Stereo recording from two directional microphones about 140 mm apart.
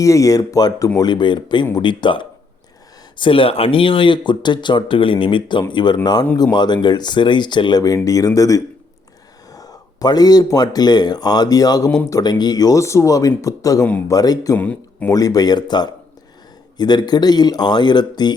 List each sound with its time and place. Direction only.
0.0 s speech: 25° left (ahead or behind)
14.5 s speech: 10° left (ahead or behind)
15.1 s speech: 25° left (ahead or behind)